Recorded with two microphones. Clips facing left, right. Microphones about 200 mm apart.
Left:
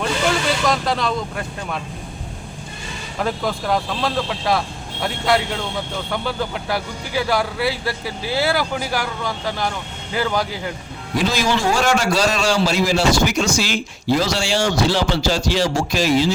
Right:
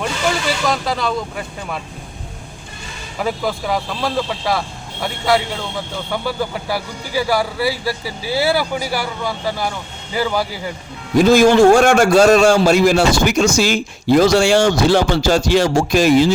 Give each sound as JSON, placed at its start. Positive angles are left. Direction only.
{"t": 0.7, "sound": "speech", "side_deg": 0}
{"t": 3.2, "sound": "speech", "side_deg": -5}
{"t": 11.2, "sound": "a man's voice", "side_deg": -50}